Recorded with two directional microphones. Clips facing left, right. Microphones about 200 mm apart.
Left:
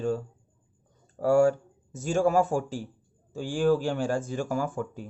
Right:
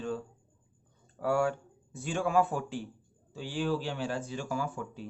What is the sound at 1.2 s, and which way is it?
Speech, 40° left (ahead or behind).